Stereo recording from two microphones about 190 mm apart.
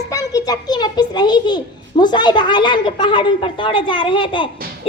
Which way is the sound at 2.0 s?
25° left (ahead or behind).